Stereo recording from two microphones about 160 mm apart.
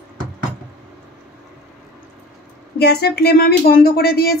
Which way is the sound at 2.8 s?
90° left.